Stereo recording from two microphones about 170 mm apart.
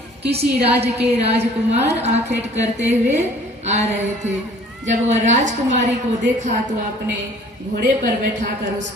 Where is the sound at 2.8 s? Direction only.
40° right (ahead or behind).